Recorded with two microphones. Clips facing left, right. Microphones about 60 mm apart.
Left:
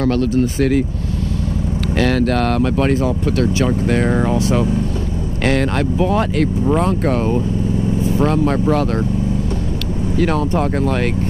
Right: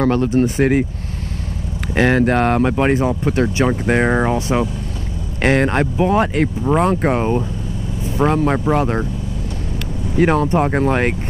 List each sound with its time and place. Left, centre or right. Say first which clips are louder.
0.0 s speech: right 1 dB; right
2.0 s speech: right 2 dB; right
10.1 s speech: right 3 dB; right